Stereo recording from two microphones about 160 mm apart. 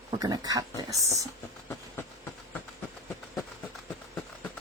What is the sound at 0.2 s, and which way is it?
Speech, 25° right (ahead or behind).